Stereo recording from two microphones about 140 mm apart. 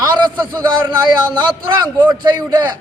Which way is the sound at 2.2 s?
30° right (ahead or behind).